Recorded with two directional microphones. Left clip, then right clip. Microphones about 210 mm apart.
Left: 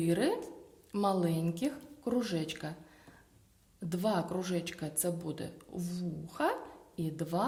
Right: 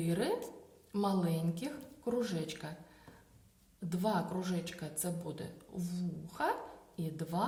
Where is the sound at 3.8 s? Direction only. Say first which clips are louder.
Left 2 dB; 40° left (ahead or behind).